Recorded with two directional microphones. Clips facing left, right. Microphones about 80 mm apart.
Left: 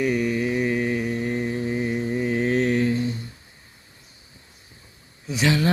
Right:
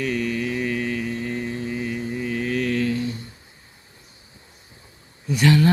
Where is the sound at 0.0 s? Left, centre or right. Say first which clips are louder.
Left 2 dB; centre.